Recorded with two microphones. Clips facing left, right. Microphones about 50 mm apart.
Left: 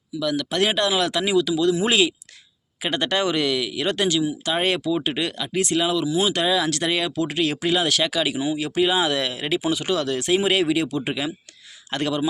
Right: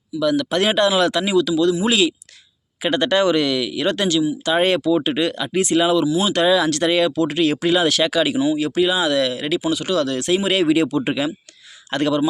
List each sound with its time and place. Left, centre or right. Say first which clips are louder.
0.2 s speech: right 4 dB; centre
1.4 s speech: right 3 dB; centre
1.8 s speech: right 2 dB; left
2.8 s speech: right 6 dB; centre
8.4 s speech: right 4 dB; centre
10.7 s speech: right 5 dB; centre